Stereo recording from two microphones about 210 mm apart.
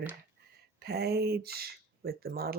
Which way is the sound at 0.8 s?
50° right (ahead or behind).